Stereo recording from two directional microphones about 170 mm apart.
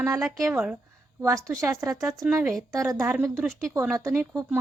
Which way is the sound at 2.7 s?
15° right (ahead or behind).